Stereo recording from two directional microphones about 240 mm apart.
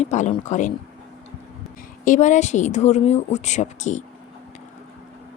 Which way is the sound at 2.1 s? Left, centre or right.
Left.